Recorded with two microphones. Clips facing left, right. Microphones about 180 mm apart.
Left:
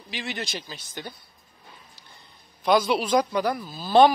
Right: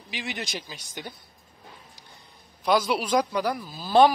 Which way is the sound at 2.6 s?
5° right (ahead or behind).